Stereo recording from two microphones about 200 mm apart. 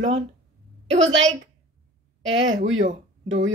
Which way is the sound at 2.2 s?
75° right (ahead or behind).